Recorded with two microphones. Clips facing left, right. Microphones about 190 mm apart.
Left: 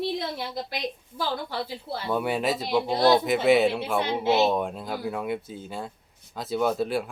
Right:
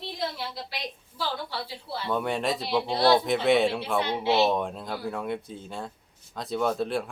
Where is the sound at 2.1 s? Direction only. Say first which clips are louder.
Left 2 dB; 5° left (ahead or behind).